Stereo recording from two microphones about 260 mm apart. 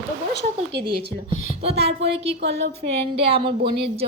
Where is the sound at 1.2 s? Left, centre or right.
Right.